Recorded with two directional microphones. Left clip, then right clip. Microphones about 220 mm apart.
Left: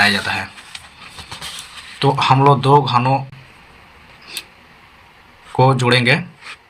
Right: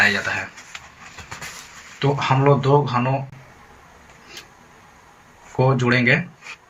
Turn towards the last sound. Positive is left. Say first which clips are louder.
# left 4 dB
turn(degrees=25)  # may be behind; listen again after turning